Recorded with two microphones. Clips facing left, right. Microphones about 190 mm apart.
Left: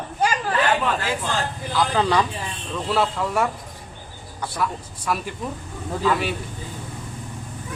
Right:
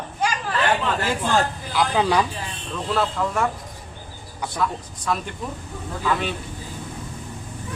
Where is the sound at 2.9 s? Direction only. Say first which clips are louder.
Left 1 dB; 5° left (ahead or behind).